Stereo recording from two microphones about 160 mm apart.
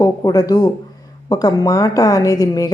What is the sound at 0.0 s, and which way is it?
A woman's voice, 25° left (ahead or behind).